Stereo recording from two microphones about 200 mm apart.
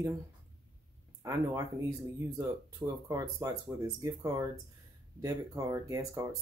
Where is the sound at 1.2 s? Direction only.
15° right (ahead or behind).